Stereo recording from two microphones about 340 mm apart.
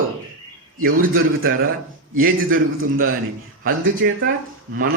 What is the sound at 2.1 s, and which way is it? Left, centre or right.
Speech, right.